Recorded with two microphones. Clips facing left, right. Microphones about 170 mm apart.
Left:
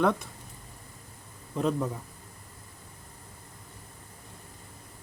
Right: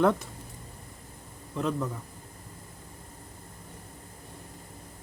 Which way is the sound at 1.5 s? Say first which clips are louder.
Left 2 dB; 15° left (ahead or behind).